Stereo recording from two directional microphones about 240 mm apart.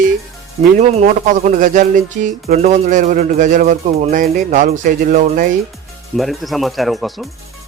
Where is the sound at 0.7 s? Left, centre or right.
Right.